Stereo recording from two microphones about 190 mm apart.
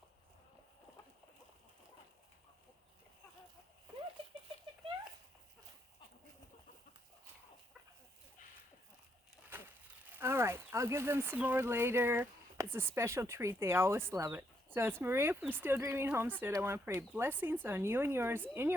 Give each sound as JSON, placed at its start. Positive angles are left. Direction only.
{"t": 4.2, "sound": "bird flight", "side_deg": -25}
{"t": 9.5, "sound": "speech", "side_deg": -10}